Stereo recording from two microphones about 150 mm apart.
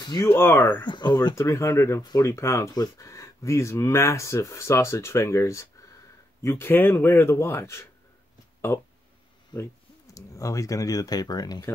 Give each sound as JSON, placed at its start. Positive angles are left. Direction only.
{"t": 0.0, "sound": "speech", "side_deg": 30}
{"t": 0.3, "sound": "a man's voice", "side_deg": 15}
{"t": 0.8, "sound": "a man's voice", "side_deg": 30}
{"t": 10.1, "sound": "speech", "side_deg": 20}